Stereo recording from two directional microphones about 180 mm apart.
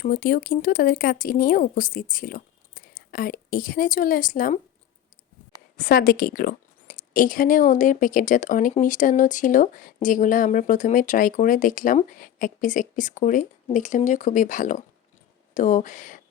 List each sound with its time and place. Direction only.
0.0 s a woman's voice: 50° left (ahead or behind)
5.7 s a woman's voice: 55° left (ahead or behind)